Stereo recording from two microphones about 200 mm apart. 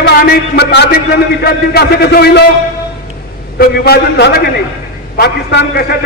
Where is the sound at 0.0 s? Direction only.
55° left (ahead or behind).